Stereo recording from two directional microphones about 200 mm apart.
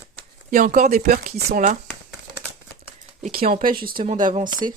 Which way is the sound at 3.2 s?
40° right (ahead or behind).